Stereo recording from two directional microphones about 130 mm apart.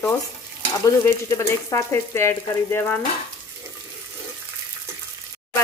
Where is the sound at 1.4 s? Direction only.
20° left (ahead or behind).